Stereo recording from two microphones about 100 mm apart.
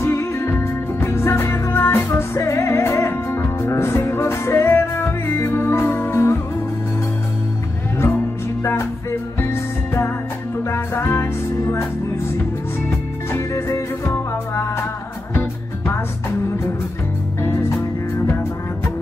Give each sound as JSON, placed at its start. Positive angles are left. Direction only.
{"t": 0.0, "sound": "music", "side_deg": 25}
{"t": 9.4, "sound": "music", "side_deg": 25}
{"t": 13.3, "sound": "music", "side_deg": 30}
{"t": 17.4, "sound": "music", "side_deg": 25}